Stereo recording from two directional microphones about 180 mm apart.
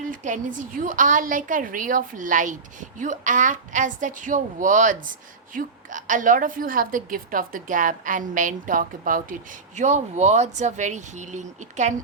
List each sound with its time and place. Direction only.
0.0 s a woman's voice: 45° right (ahead or behind)